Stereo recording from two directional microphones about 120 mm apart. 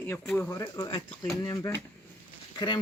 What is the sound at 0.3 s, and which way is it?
Speech, 25° left (ahead or behind).